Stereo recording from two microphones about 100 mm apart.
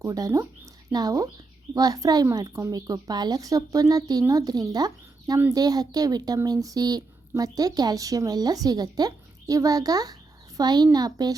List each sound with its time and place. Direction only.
0.0 s a child's voice: 35° right (ahead or behind)